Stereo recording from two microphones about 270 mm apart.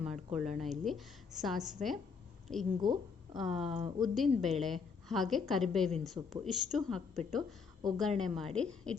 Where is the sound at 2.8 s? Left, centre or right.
Centre.